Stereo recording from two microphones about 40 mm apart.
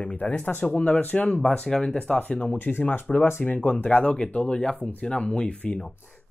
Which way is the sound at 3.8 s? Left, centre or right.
Left.